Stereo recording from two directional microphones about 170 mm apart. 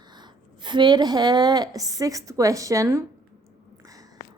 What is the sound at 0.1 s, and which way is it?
A woman's voice, 25° right (ahead or behind).